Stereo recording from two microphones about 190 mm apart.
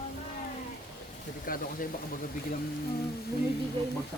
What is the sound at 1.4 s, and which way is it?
Speech, 45° left (ahead or behind).